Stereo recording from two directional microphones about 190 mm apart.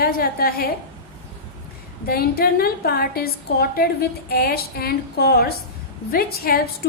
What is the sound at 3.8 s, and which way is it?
Speech, 55° left (ahead or behind).